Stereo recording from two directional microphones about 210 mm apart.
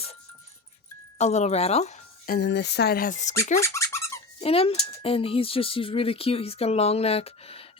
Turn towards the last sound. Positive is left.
turn(degrees=30)  # may be behind; listen again after turning